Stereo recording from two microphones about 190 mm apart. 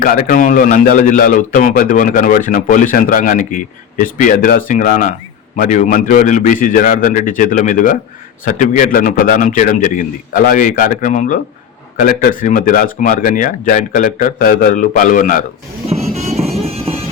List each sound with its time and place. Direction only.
0.0 s a man's voice: 50° left (ahead or behind)
16.1 s music: 35° right (ahead or behind)